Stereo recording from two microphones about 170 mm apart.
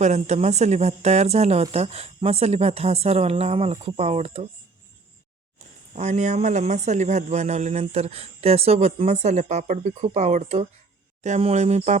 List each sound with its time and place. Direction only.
0.0 s speech: 40° right (ahead or behind)
5.5 s speech: 40° right (ahead or behind)